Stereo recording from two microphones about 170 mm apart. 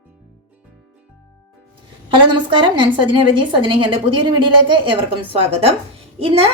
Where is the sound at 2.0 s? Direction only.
30° right (ahead or behind).